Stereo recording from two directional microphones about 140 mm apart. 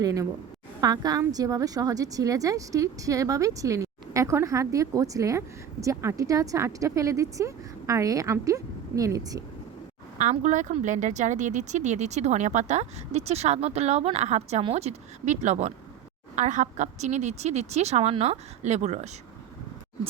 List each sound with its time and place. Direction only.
0.0 s speech: 25° right (ahead or behind)
10.2 s speech: 60° right (ahead or behind)